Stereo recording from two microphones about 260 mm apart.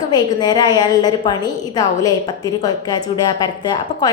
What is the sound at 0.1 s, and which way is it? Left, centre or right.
A woman's voice, centre.